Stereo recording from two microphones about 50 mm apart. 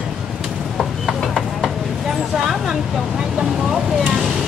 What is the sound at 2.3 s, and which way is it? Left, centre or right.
Vehicle, centre.